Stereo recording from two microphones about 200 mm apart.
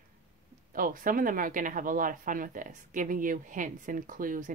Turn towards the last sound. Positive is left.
turn(degrees=-40)  # may be behind; listen again after turning